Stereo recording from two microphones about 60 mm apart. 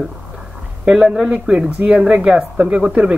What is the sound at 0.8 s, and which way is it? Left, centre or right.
Speech, centre.